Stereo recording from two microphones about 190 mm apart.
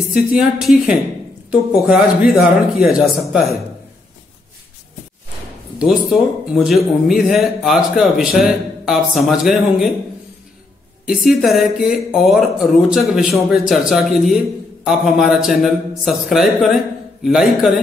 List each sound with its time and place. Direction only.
0.1 s a man's voice: 5° right (ahead or behind)
5.8 s a man's voice: centre (ahead or behind)
11.1 s a man's voice: centre (ahead or behind)